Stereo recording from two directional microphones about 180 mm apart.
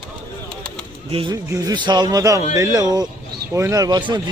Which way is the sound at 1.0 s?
30° right (ahead or behind).